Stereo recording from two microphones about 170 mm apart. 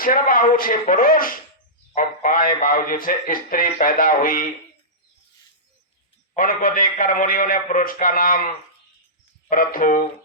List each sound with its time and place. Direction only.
0.0 s a man's voice: 55° left (ahead or behind)
6.3 s a man's voice: 55° left (ahead or behind)
9.5 s a man's voice: 55° left (ahead or behind)